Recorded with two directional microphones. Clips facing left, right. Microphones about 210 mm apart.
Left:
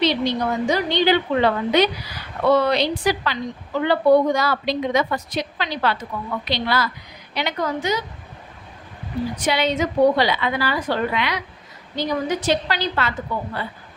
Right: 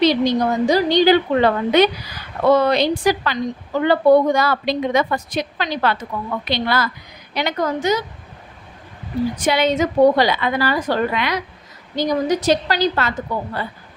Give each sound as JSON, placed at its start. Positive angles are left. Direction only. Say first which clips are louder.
{"t": 0.0, "sound": "a woman's voice", "louder": "right 5 dB", "side_deg": -40}
{"t": 9.4, "sound": "a woman's voice", "louder": "right 3 dB", "side_deg": -45}